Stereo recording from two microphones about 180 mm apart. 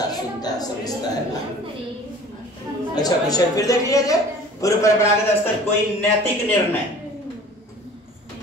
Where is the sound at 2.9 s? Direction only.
20° left (ahead or behind).